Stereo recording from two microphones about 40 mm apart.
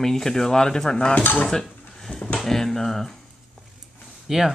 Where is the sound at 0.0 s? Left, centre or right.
Centre.